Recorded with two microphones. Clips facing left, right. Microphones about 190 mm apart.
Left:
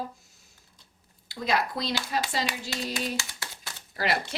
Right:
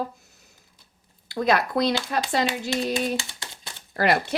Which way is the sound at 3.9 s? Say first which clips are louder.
Right 7 dB; 55° right (ahead or behind).